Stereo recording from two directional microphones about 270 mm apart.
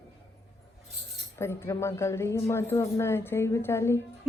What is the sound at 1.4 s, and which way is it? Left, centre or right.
Speech, centre.